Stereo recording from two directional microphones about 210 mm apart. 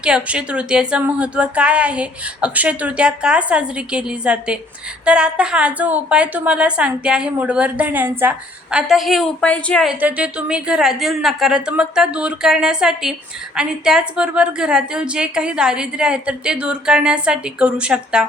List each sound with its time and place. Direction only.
0.0 s a woman's voice: 5° right (ahead or behind)
10.0 s a woman's voice: 5° right (ahead or behind)